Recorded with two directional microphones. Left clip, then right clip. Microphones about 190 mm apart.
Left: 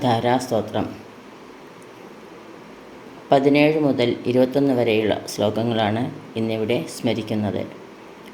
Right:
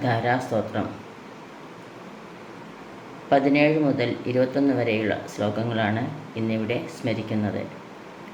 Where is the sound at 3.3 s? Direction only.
45° left (ahead or behind).